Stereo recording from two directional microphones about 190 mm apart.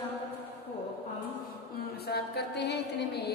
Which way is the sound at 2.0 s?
60° left (ahead or behind).